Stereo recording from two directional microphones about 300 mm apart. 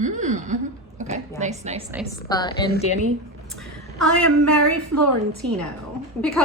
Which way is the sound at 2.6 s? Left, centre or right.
Left.